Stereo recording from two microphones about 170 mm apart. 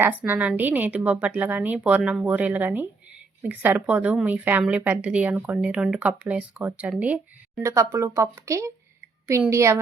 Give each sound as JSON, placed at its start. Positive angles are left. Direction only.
{"t": 0.0, "sound": "a woman's voice", "side_deg": -10}